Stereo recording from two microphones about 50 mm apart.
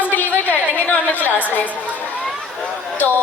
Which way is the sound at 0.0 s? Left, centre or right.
Left.